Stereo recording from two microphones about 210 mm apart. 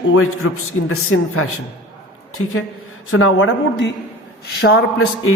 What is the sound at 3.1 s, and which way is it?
Speech, 65° left (ahead or behind).